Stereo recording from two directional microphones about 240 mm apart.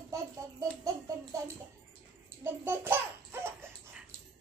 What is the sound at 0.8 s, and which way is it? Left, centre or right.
Music, centre.